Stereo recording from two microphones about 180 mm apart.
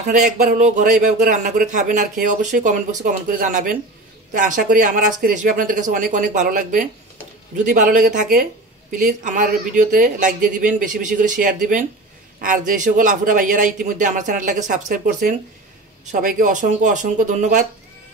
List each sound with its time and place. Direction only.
0.1 s speech: 45° right (ahead or behind)